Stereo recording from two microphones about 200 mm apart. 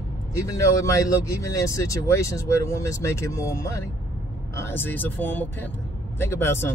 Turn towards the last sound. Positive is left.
turn(degrees=10)  # may be behind; listen again after turning